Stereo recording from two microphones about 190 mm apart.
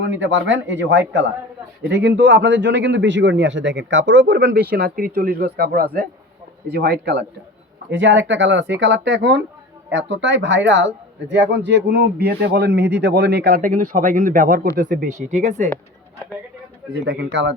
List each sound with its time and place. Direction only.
0.0 s speech: 70° right (ahead or behind)
4.7 s speech: 50° right (ahead or behind)
16.9 s speech: 60° right (ahead or behind)